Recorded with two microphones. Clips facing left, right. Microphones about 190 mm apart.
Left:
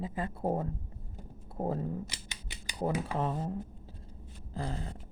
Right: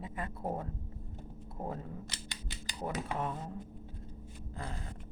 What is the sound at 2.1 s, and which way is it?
Scissors, 15° left (ahead or behind).